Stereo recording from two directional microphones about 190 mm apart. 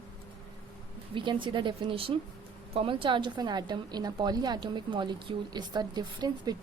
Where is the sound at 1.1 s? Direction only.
25° right (ahead or behind).